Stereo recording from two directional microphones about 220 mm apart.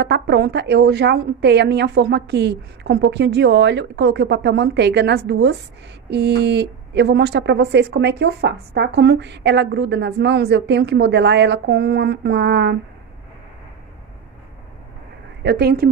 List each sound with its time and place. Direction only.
0.0 s speech: 50° right (ahead or behind)
15.4 s speech: 45° right (ahead or behind)